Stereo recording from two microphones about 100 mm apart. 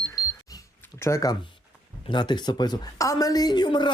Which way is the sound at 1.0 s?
30° left (ahead or behind).